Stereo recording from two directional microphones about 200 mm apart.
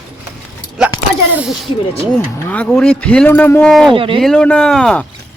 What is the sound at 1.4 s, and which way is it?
Speech, centre (ahead or behind).